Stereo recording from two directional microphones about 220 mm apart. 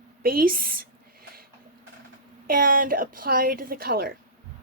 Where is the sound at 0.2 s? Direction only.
40° right (ahead or behind).